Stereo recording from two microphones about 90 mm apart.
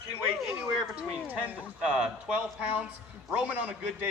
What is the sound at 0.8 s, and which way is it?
Speech, 5° right (ahead or behind).